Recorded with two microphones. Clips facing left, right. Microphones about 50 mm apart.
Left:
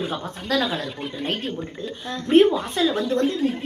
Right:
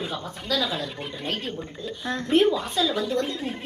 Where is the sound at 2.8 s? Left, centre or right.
Left.